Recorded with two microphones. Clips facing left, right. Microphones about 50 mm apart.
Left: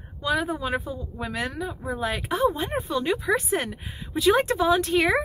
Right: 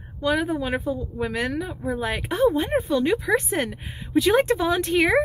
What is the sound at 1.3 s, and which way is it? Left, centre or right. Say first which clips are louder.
A woman's voice: right 3 dB; right.